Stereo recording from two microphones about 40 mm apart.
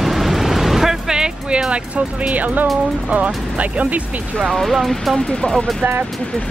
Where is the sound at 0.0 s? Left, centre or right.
Centre.